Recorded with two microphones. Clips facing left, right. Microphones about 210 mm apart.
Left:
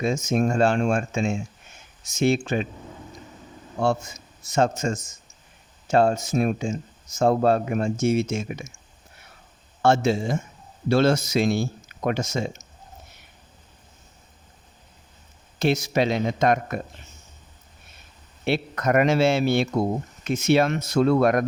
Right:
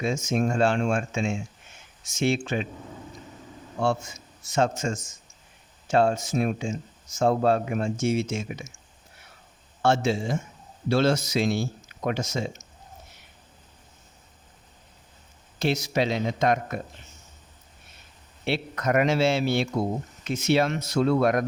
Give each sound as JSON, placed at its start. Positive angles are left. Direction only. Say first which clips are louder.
{"t": 0.0, "sound": "speech", "louder": "left 3 dB", "side_deg": 40}
{"t": 3.8, "sound": "a man's voice", "louder": "left 2 dB", "side_deg": 40}
{"t": 9.8, "sound": "speech", "louder": "left 3 dB", "side_deg": 45}
{"t": 15.5, "sound": "speech", "louder": "left 3 dB", "side_deg": 55}
{"t": 18.4, "sound": "speech", "louder": "left 3 dB", "side_deg": 50}